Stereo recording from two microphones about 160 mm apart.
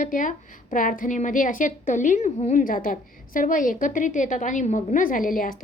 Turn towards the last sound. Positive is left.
turn(degrees=60)  # may be behind; listen again after turning